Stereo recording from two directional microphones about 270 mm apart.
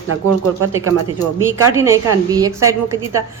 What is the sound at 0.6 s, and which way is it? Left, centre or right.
Speech, right.